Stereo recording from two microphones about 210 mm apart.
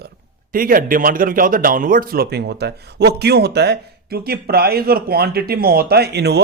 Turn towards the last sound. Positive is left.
turn(degrees=-50)  # may be behind; listen again after turning